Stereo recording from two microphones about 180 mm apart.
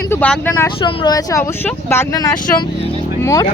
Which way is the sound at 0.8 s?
30° left (ahead or behind).